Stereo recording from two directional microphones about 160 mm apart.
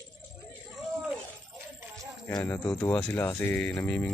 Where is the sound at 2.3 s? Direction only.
20° left (ahead or behind).